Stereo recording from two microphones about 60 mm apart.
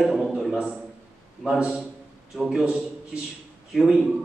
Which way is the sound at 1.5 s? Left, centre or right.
Centre.